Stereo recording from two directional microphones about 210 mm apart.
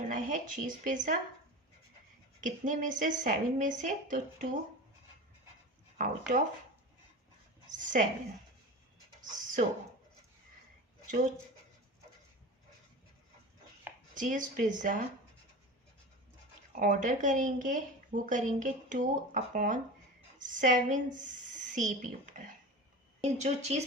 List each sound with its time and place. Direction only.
0.1 s speech: 35° right (ahead or behind)
2.4 s speech: 40° right (ahead or behind)
6.0 s speech: 40° right (ahead or behind)
7.7 s speech: 40° right (ahead or behind)
9.3 s a sound: 40° right (ahead or behind)
14.2 s speech: 40° right (ahead or behind)
16.8 s a woman's voice: 40° right (ahead or behind)